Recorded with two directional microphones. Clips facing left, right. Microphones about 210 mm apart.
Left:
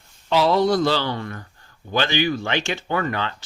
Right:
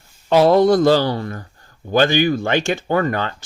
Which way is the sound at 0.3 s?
50° right (ahead or behind).